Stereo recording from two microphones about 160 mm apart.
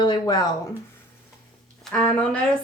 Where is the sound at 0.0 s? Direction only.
25° left (ahead or behind).